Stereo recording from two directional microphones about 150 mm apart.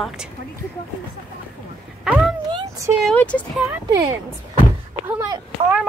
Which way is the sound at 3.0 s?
10° left (ahead or behind).